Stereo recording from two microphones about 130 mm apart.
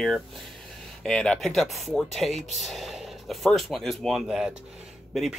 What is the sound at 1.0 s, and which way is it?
Speech, 5° left (ahead or behind).